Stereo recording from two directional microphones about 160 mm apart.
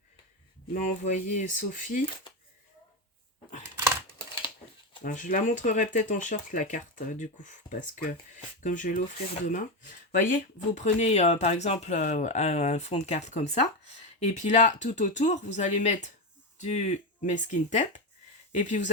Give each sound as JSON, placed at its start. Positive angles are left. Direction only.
{"t": 0.7, "sound": "speech", "side_deg": 50}
{"t": 3.8, "sound": "computer keyboard", "side_deg": -15}
{"t": 5.0, "sound": "speech", "side_deg": 55}